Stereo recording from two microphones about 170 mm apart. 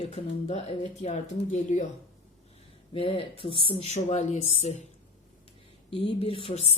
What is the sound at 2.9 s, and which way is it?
Speech, 35° left (ahead or behind).